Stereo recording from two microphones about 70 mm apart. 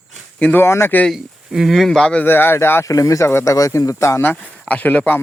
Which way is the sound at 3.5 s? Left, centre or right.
Left.